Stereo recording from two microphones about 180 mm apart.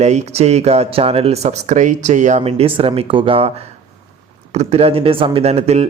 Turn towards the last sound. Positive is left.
turn(degrees=-35)  # may be behind; listen again after turning